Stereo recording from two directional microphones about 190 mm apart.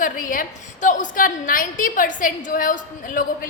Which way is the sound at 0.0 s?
45° left (ahead or behind).